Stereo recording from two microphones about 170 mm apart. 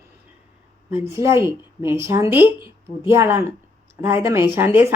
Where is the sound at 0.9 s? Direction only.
15° right (ahead or behind).